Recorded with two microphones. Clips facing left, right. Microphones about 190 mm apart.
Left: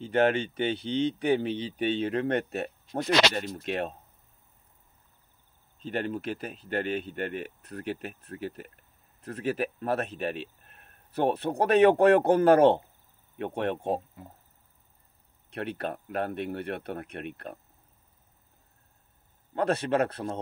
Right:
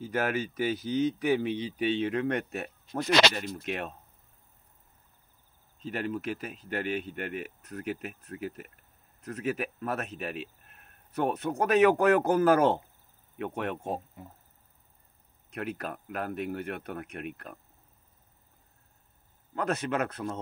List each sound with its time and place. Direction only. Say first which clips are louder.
0.0 s speech: left 5 dB; 30° left (ahead or behind)
5.9 s speech: left 1 dB; 30° left (ahead or behind)
15.5 s speech: left 2 dB; 30° left (ahead or behind)
19.5 s speech: left 4 dB; 30° left (ahead or behind)